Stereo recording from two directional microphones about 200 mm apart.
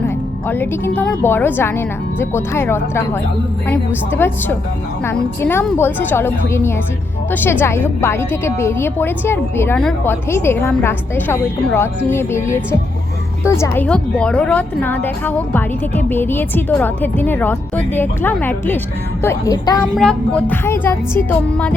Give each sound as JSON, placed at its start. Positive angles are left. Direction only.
{"t": 0.4, "sound": "a woman's voice", "side_deg": 10}
{"t": 13.6, "sound": "a woman's voice", "side_deg": 10}
{"t": 20.0, "sound": "a woman's voice", "side_deg": 5}